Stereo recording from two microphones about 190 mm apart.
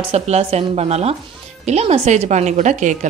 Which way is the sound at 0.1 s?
35° right (ahead or behind).